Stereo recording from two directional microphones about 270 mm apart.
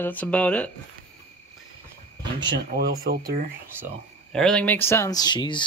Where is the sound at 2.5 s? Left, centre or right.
Right.